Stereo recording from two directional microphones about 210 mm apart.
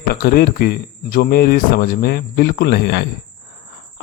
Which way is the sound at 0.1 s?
45° left (ahead or behind).